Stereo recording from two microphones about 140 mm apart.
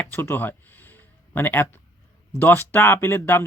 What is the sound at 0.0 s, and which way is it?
Speech, 15° left (ahead or behind).